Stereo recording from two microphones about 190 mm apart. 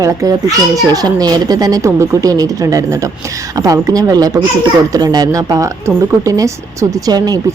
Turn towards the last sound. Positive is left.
turn(degrees=-20)  # may be behind; listen again after turning